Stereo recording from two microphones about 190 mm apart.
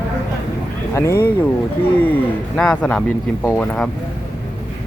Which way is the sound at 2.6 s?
5° left (ahead or behind).